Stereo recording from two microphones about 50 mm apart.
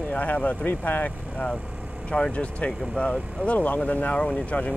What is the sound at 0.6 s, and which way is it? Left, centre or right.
Speech, left.